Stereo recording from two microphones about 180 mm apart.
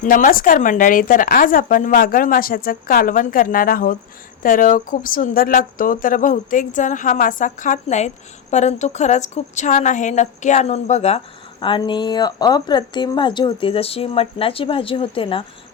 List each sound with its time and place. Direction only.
0.0 s speech: 50° left (ahead or behind)
11.6 s a woman's voice: 25° left (ahead or behind)